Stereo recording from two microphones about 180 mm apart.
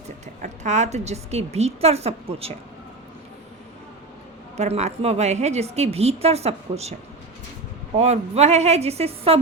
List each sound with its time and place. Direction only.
0.4 s a woman's voice: 40° right (ahead or behind)
4.5 s a woman's voice: 35° right (ahead or behind)
7.9 s a woman's voice: 35° right (ahead or behind)